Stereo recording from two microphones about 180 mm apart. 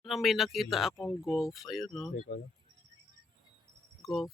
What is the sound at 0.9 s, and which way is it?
Speech, 15° left (ahead or behind).